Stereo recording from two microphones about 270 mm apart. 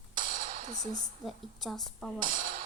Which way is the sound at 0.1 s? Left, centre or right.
Right.